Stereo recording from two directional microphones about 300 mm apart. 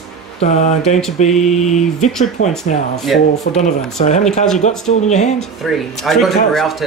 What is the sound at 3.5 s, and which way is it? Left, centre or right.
Speech, left.